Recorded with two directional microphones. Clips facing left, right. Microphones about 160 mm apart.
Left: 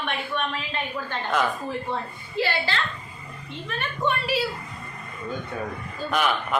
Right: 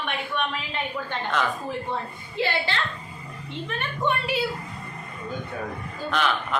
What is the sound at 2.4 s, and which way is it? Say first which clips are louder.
Speech: left 1 dB; 20° right (ahead or behind).